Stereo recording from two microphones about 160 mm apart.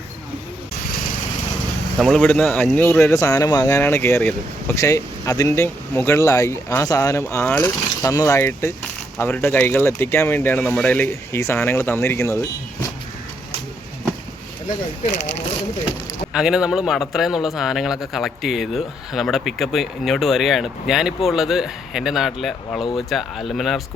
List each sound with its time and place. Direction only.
2.0 s speech: 5° left (ahead or behind)
16.3 s a man's voice: 5° right (ahead or behind)